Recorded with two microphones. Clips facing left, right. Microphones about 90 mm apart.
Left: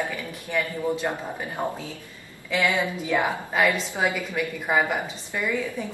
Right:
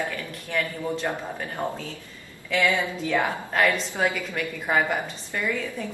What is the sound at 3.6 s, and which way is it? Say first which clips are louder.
A woman's voice: even; 5° left (ahead or behind).